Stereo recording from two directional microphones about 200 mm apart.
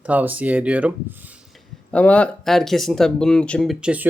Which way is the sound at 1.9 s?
5° left (ahead or behind).